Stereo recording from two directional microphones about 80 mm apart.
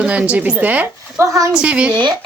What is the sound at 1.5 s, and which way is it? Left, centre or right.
Speech, centre.